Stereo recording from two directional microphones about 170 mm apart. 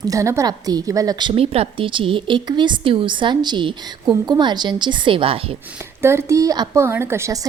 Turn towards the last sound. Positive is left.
turn(degrees=-15)  # may be behind; listen again after turning